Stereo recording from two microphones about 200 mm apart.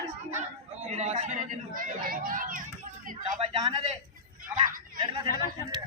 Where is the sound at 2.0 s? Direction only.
45° right (ahead or behind).